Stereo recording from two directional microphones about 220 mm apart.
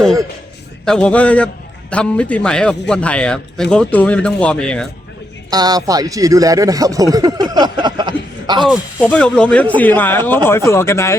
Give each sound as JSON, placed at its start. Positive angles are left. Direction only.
{"t": 0.9, "sound": "a man's voice", "side_deg": 5}
{"t": 5.5, "sound": "speech", "side_deg": -15}
{"t": 8.6, "sound": "speech", "side_deg": 0}